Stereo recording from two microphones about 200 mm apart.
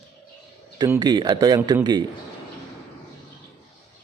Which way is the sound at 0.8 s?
20° right (ahead or behind).